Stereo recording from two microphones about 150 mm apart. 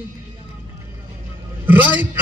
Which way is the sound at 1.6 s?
10° right (ahead or behind).